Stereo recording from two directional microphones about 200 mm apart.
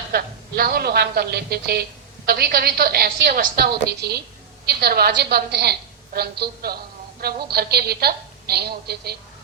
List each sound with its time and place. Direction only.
0.1 s a woman's voice: 50° right (ahead or behind)